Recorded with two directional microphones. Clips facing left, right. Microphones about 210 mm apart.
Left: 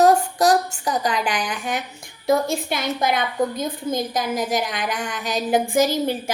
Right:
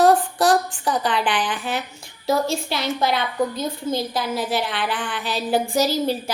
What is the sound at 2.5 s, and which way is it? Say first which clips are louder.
A woman's voice: even; 50° left (ahead or behind).